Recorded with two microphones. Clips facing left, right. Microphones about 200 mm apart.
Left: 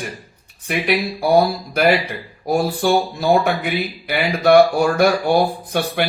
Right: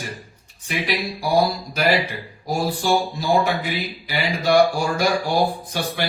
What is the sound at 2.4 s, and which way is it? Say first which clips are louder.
Speech: left 4 dB; 60° left (ahead or behind).